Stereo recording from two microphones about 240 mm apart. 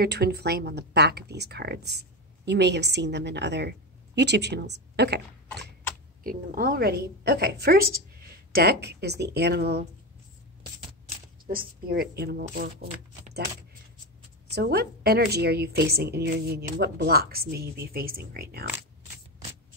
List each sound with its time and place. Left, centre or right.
0.0 s a woman's voice: right
11.4 s a woman's voice: right
14.5 s a woman's voice: right